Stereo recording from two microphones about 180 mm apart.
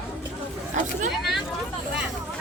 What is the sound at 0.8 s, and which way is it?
Speech, 45° right (ahead or behind).